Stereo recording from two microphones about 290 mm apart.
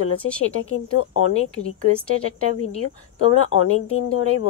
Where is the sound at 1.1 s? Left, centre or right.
Left.